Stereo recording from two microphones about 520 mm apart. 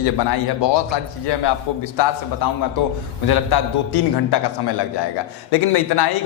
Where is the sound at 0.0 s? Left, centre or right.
Left.